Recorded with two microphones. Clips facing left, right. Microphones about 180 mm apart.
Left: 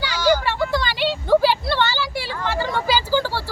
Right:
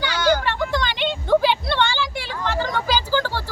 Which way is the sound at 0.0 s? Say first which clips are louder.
Left 1 dB; 10° left (ahead or behind).